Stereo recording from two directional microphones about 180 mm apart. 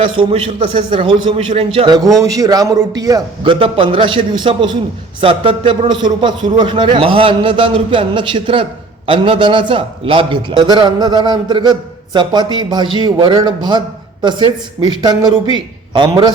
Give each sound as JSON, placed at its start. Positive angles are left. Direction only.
{"t": 0.2, "sound": "a man's voice", "side_deg": -30}